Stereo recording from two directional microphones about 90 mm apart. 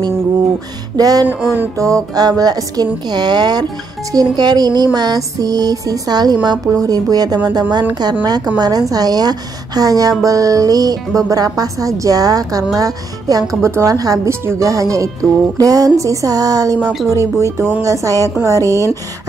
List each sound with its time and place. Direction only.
0.9 s a woman's voice: 45° right (ahead or behind)